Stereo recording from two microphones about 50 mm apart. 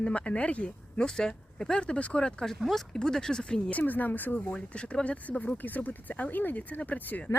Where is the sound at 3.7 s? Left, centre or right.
Left.